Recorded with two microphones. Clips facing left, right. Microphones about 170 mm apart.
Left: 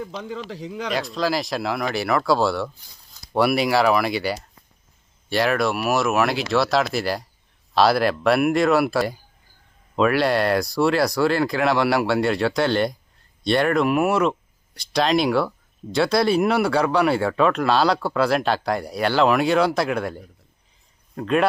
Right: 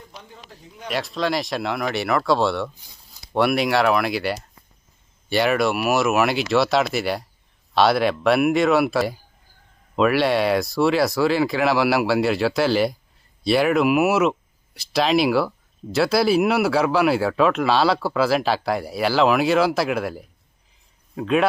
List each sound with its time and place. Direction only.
0.0 s a man's voice: 90° left
0.9 s speech: centre (ahead or behind)